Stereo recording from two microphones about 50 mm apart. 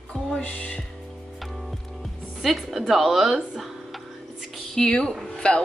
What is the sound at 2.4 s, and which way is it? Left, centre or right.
Speech, centre.